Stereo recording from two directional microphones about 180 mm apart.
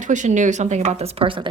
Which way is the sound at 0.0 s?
45° right (ahead or behind).